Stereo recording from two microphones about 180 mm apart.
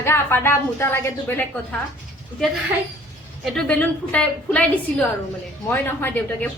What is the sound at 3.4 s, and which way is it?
A woman's voice, 5° left (ahead or behind).